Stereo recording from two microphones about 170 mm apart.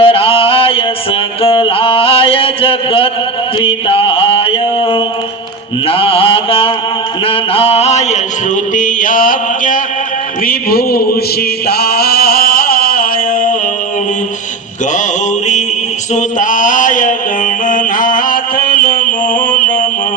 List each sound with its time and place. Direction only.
0.0 s mantra: 35° left (ahead or behind)
1.4 s a sound: 30° left (ahead or behind)
5.9 s mantra: 35° left (ahead or behind)
8.7 s mantra: 50° left (ahead or behind)
10.4 s a sound: 60° left (ahead or behind)
11.7 s chant: 65° left (ahead or behind)
16.1 s mantra: 50° left (ahead or behind)